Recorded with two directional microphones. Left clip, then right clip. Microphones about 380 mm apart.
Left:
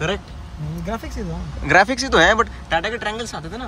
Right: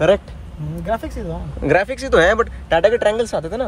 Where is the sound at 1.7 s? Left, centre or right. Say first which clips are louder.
Left 1 dB; centre.